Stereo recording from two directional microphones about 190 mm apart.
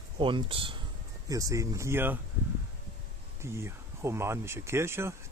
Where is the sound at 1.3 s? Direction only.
15° right (ahead or behind).